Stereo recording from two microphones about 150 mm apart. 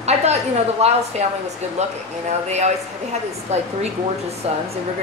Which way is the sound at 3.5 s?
50° right (ahead or behind).